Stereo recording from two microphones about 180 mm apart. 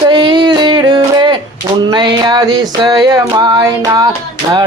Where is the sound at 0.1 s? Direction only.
25° right (ahead or behind).